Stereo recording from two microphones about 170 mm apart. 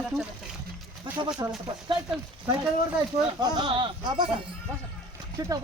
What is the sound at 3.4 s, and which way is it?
Speech, 25° right (ahead or behind).